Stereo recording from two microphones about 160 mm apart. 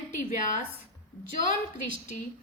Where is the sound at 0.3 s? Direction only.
55° left (ahead or behind).